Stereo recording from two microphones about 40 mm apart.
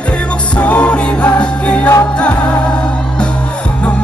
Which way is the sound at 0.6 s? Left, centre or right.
Left.